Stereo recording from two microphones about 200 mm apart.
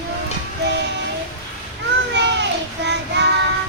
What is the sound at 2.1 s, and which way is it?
Child singing, 60° right (ahead or behind).